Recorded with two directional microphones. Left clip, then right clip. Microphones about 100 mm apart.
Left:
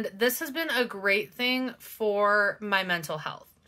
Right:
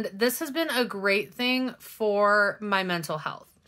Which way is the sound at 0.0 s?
25° right (ahead or behind).